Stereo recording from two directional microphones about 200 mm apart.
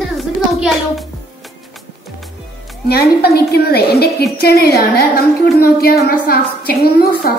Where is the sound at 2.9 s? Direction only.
50° left (ahead or behind).